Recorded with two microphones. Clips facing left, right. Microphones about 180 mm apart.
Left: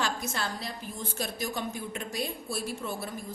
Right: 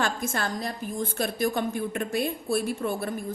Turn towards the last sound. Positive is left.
turn(degrees=-55)  # may be behind; listen again after turning